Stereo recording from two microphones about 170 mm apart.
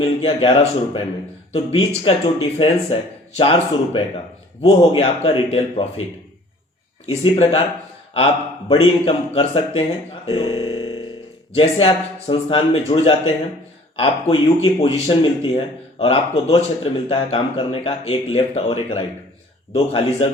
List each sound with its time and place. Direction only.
0.0 s speech: 30° left (ahead or behind)
2.0 s speech: 30° left (ahead or behind)
7.1 s speech: 30° left (ahead or behind)
8.7 s speech: 30° left (ahead or behind)
10.2 s a sound: 25° left (ahead or behind)
11.5 s speech: 30° left (ahead or behind)